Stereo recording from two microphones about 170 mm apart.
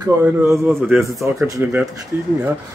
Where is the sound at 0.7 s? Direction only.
5° right (ahead or behind).